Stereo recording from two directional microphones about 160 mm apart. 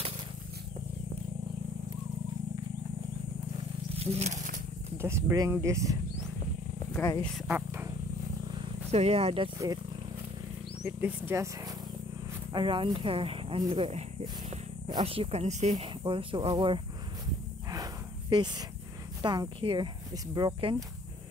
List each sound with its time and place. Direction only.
3.9 s wild animals: 40° right (ahead or behind)
4.9 s speech: 15° right (ahead or behind)
7.0 s speech: 10° left (ahead or behind)
7.4 s speech: 15° right (ahead or behind)
8.9 s speech: 40° right (ahead or behind)
10.8 s speech: 10° right (ahead or behind)
12.5 s speech: 30° right (ahead or behind)
16.0 s speech: 30° right (ahead or behind)
18.3 s speech: 25° right (ahead or behind)